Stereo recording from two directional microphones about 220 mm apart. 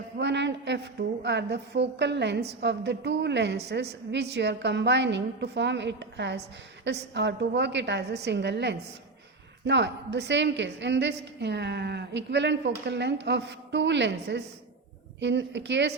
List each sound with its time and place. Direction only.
0.2 s a woman's voice: 50° right (ahead or behind)